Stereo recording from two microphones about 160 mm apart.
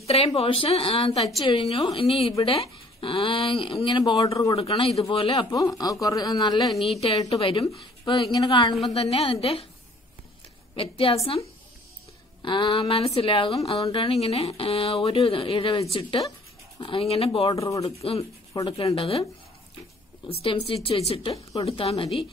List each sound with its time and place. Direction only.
0.0 s speech: 40° left (ahead or behind)
4.6 s speech: 35° left (ahead or behind)
6.7 s a woman's voice: centre (ahead or behind)
7.0 s speech: 35° left (ahead or behind)
10.8 s speech: 35° left (ahead or behind)
12.4 s speech: 30° left (ahead or behind)
17.6 s speech: 20° left (ahead or behind)
17.8 s speech: 40° left (ahead or behind)
18.5 s speech: 25° left (ahead or behind)
18.9 s speech: 35° left (ahead or behind)
20.4 s speech: 35° left (ahead or behind)